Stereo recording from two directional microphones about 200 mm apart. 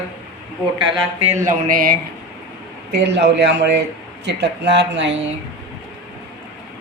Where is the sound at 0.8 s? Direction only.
30° right (ahead or behind); by 2.0 s 45° right (ahead or behind).